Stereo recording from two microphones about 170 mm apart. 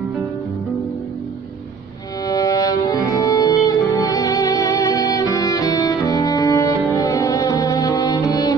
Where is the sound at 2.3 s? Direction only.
20° left (ahead or behind).